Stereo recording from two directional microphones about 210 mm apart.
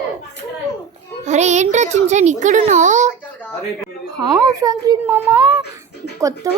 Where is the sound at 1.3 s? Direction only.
35° right (ahead or behind).